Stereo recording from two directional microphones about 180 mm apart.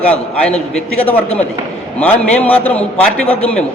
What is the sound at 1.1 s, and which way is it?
A man's voice, 10° left (ahead or behind).